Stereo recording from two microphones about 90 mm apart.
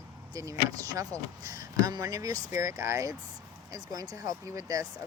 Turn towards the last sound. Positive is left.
turn(degrees=-40)  # may be behind; listen again after turning